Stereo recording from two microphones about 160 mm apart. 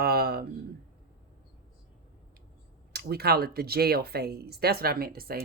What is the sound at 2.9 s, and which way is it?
Speech, 80° right.